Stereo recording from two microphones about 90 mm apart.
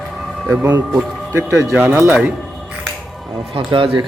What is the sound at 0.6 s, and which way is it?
A man's voice, 25° right (ahead or behind).